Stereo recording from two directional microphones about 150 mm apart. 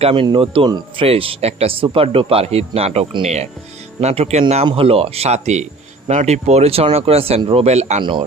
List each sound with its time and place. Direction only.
0.0 s speech: 35° right (ahead or behind)